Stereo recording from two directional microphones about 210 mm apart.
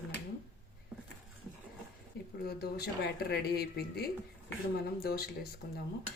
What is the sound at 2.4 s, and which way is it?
Speech, 45° left (ahead or behind).